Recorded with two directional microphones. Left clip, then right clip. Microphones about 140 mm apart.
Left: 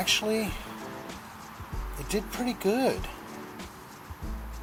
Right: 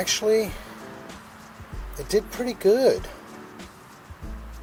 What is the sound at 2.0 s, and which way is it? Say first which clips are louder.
Speech: right 7 dB; 45° right (ahead or behind).